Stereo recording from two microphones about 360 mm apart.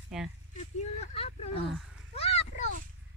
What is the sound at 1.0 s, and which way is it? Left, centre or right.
Speech, centre.